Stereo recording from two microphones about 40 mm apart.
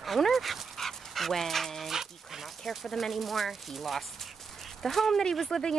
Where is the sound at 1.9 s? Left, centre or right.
Centre.